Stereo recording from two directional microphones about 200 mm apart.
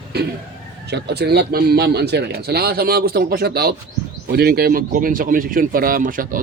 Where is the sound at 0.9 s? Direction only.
55° right (ahead or behind).